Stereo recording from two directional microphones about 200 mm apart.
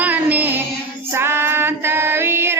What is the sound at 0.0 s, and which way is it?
Music, 10° right (ahead or behind).